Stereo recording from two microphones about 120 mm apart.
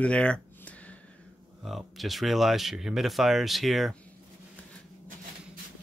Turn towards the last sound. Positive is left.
turn(degrees=0)  # may be behind; listen again after turning